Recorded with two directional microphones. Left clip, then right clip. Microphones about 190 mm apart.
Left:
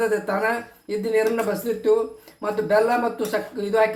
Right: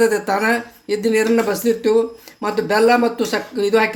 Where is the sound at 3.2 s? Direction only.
45° right (ahead or behind).